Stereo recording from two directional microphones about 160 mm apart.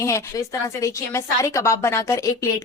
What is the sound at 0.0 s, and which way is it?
A woman's voice, 20° left (ahead or behind).